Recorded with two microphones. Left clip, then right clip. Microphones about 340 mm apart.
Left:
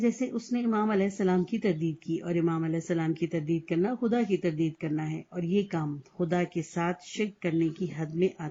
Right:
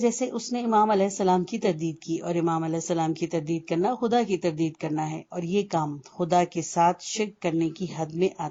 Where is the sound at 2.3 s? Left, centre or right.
Right.